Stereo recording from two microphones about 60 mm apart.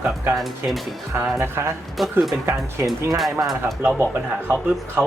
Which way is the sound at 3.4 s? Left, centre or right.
Centre.